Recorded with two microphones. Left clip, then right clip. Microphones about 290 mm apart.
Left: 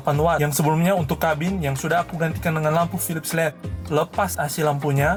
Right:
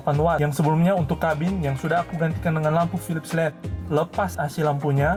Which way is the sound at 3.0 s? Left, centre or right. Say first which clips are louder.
Left 2 dB; centre.